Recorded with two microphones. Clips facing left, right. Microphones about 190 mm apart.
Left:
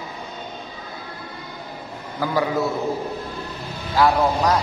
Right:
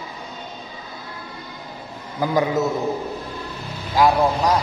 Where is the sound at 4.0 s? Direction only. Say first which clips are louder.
Right 1 dB; 15° right (ahead or behind).